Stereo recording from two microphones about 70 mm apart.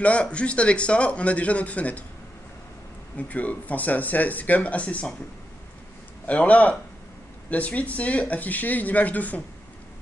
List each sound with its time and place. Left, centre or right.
0.0 s speech: centre
3.2 s speech: left
6.2 s speech: left